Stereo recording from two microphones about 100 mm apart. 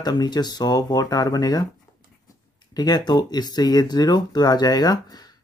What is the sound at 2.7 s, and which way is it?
Speech, 40° left (ahead or behind).